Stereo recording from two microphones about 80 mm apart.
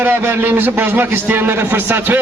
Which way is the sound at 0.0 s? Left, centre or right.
Right.